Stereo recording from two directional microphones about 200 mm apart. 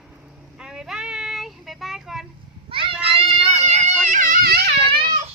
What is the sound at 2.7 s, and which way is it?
Children playing, 25° right (ahead or behind).